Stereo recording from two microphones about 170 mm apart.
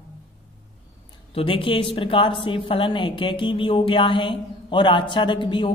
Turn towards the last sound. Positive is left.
turn(degrees=30)  # may be behind; listen again after turning